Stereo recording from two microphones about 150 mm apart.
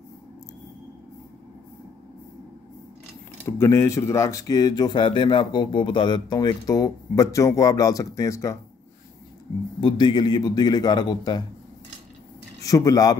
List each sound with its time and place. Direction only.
3.4 s speech: 20° left (ahead or behind)
9.8 s speech: 30° left (ahead or behind)
12.6 s speech: 25° left (ahead or behind)